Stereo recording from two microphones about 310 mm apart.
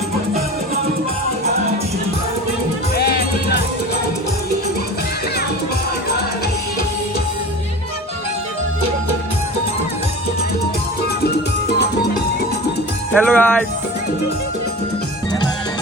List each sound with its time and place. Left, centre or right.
2.9 s music: left
13.1 s speech: centre